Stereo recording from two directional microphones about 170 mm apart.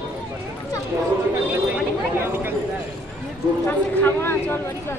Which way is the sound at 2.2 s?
15° right (ahead or behind).